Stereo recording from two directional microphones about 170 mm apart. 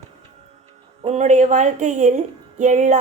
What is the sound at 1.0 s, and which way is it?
A woman's voice, 40° right (ahead or behind).